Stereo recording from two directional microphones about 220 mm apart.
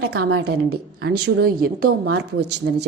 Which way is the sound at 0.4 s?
45° right (ahead or behind).